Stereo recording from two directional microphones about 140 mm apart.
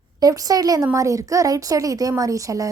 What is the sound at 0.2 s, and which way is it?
A woman's voice, 25° right (ahead or behind).